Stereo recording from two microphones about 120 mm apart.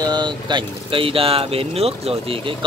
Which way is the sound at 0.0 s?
35° right (ahead or behind).